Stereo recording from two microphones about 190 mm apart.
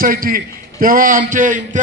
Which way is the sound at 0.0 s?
50° right (ahead or behind).